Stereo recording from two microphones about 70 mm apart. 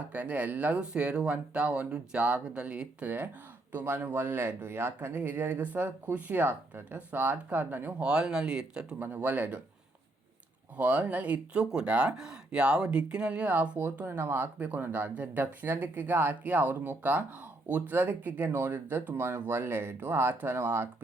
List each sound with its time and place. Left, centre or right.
0.1 s speech: right
3.7 s speech: right
9.0 s speech: right
10.8 s speech: right